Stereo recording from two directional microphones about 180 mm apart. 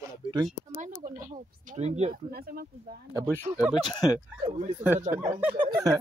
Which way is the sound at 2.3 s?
60° right (ahead or behind).